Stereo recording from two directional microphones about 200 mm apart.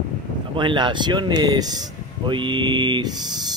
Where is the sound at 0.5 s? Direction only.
20° right (ahead or behind).